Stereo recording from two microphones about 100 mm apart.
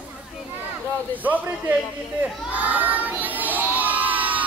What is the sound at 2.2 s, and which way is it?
Children shouting, 15° right (ahead or behind).